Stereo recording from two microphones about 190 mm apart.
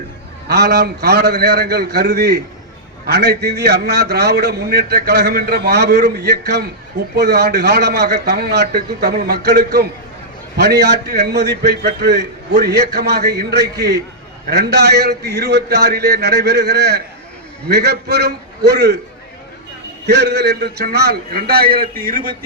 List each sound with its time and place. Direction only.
0.4 s a man's voice: 60° right (ahead or behind)
20.1 s a man's voice: 60° right (ahead or behind)